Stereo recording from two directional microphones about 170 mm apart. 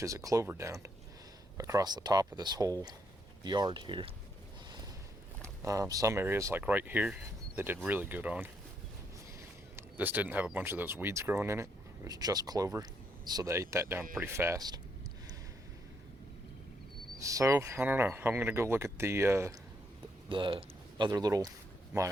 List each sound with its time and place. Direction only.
0.0 s speech: 20° right (ahead or behind)
5.6 s speech: 20° right (ahead or behind)
9.7 s speech: 10° right (ahead or behind)
17.2 s speech: 20° right (ahead or behind)
20.3 s speech: 30° right (ahead or behind)